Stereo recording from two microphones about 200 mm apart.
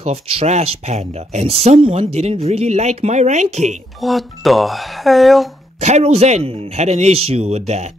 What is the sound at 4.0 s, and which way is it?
Speech, centre (ahead or behind).